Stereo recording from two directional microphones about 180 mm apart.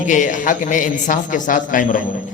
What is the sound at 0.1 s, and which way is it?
A man's voice, 45° left (ahead or behind).